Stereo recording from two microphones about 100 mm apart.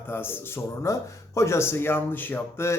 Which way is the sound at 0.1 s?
25° left (ahead or behind).